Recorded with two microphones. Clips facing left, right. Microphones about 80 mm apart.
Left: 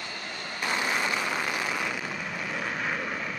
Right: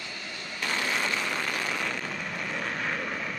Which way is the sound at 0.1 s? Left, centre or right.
Left.